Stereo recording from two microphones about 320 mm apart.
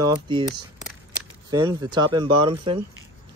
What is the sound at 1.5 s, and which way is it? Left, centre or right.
Speech, centre.